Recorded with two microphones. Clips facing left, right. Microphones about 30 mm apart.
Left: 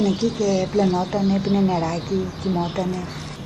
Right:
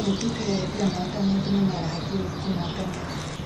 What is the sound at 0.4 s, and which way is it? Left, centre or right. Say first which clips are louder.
Speech: left 7 dB; left.